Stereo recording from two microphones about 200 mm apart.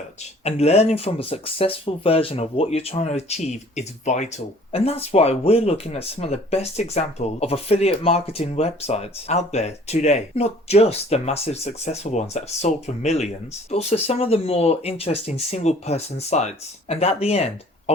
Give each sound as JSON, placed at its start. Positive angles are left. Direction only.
{"t": 0.4, "sound": "speech", "side_deg": 30}